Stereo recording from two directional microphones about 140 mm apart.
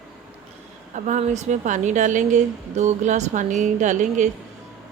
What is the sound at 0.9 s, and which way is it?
A woman's voice, 60° right (ahead or behind).